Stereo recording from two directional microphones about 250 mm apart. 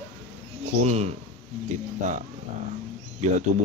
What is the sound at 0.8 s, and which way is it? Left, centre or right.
Speech, right.